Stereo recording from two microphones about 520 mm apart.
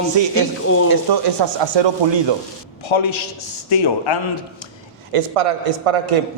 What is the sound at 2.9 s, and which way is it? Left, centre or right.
A man's voice, left.